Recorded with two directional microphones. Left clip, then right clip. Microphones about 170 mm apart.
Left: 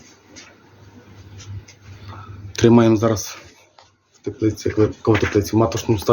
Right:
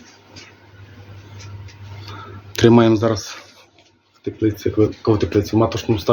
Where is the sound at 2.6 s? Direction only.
5° left (ahead or behind).